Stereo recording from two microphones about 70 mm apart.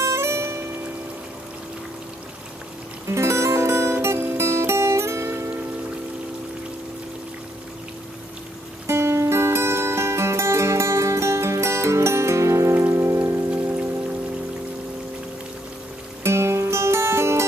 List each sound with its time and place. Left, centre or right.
0.0 s music: right
3.1 s music: right
8.8 s music: right
12.8 s rain: right
13.5 s music: right
16.3 s music: right